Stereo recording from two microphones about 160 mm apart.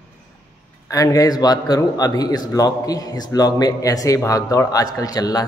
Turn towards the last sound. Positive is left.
turn(degrees=25)  # may be behind; listen again after turning